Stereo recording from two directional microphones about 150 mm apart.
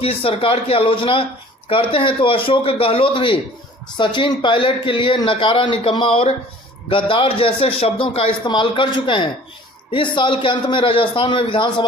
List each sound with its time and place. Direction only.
0.0 s a man's voice: 40° left (ahead or behind)